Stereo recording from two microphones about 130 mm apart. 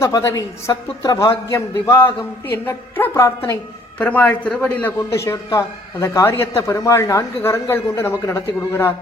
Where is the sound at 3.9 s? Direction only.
10° left (ahead or behind).